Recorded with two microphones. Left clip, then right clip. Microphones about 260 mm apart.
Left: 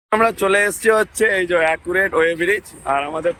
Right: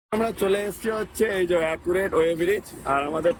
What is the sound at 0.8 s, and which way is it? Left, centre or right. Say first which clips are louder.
Speech: left 12 dB; left.